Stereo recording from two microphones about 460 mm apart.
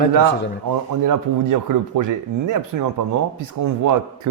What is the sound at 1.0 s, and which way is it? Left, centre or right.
Speech, right.